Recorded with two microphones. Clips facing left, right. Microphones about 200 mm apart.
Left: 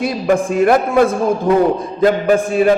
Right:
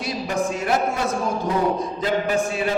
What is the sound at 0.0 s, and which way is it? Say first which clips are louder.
A man's voice: left 8 dB; 55° left (ahead or behind).